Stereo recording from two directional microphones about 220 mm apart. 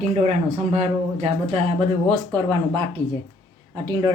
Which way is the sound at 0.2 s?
30° right (ahead or behind).